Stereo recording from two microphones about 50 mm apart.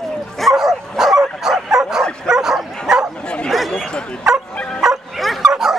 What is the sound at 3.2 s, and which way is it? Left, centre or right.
Bow-wow, centre.